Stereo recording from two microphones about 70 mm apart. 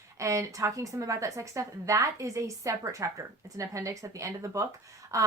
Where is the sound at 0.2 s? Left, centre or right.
Right.